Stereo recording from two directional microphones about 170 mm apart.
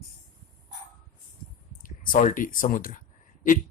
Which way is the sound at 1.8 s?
50° left (ahead or behind).